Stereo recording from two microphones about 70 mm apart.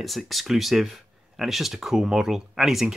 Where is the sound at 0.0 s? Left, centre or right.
Centre.